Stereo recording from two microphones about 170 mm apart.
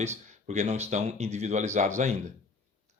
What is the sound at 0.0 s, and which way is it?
Speech, 40° right (ahead or behind).